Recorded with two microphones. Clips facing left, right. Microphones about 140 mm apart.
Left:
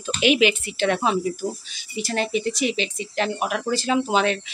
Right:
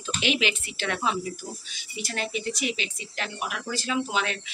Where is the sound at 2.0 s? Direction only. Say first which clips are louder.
Left 7 dB; 30° left (ahead or behind).